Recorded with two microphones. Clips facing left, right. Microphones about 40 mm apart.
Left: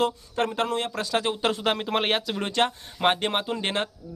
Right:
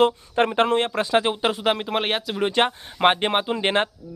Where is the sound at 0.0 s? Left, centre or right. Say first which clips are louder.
Right 6 dB; right.